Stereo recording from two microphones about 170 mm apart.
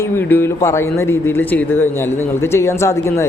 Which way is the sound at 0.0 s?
10° left (ahead or behind).